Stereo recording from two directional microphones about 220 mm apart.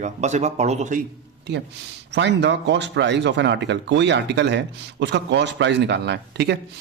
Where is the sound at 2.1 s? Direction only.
50° right (ahead or behind).